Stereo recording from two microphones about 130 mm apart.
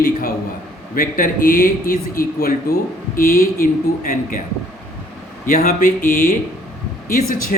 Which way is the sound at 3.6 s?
85° left.